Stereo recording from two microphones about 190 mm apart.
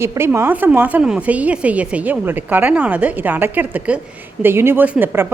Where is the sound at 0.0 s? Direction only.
15° right (ahead or behind).